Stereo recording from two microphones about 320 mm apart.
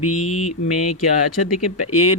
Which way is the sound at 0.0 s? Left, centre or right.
Left.